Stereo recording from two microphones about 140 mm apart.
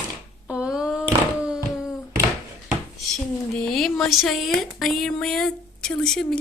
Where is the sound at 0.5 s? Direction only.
5° right (ahead or behind).